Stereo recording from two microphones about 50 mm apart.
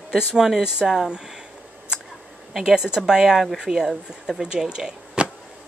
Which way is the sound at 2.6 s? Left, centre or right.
Centre.